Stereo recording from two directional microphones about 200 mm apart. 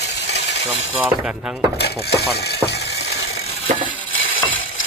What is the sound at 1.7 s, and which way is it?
Mechanisms, 55° left (ahead or behind).